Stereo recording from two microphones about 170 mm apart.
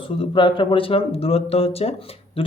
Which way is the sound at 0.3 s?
30° left (ahead or behind).